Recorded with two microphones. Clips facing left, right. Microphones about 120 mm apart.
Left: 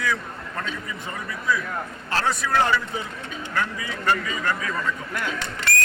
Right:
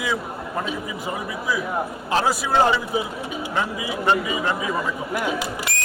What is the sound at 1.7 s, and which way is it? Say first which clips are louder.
A man's voice: right 5 dB; 15° right (ahead or behind).